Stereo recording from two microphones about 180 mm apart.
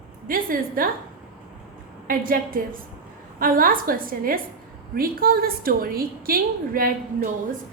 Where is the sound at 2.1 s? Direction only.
50° right (ahead or behind).